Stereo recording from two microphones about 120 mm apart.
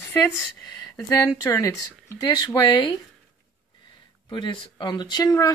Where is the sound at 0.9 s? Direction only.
25° left (ahead or behind).